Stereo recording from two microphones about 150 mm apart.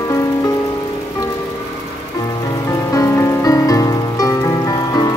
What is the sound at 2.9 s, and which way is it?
Rain on surface, 20° left (ahead or behind).